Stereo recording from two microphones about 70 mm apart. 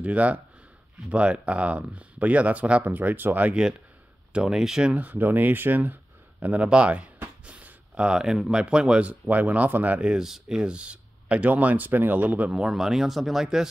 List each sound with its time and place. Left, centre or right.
0.0 s speech: centre
4.9 s speech: right
12.5 s speech: centre